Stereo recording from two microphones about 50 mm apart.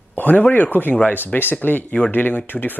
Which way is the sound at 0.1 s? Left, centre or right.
Left.